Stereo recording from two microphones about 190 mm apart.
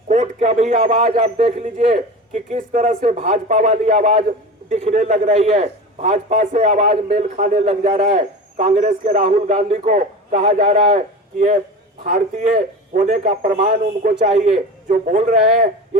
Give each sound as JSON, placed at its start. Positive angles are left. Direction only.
{"t": 0.1, "sound": "a man's voice", "side_deg": -35}